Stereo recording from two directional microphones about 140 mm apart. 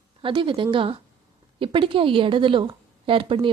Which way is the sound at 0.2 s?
35° right (ahead or behind).